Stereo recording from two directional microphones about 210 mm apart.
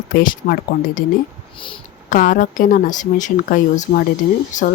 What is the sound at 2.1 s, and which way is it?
A woman's voice, 40° left (ahead or behind).